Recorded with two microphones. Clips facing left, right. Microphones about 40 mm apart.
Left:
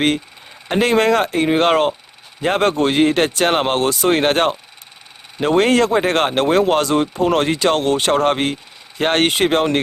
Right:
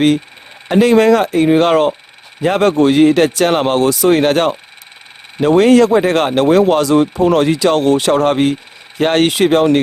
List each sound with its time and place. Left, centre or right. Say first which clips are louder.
0.7 s speech: right 5 dB; left
5.5 s speech: right 5 dB; left
6.9 s speech: right 5 dB; right
7.3 s speech: right 2 dB; left